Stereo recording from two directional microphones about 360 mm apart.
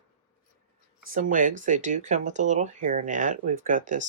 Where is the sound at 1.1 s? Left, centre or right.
Right.